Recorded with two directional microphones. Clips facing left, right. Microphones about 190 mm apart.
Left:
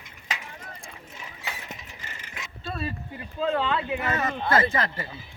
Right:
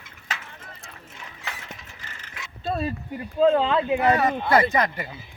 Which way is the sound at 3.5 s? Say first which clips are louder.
Right 4 dB; 35° right (ahead or behind).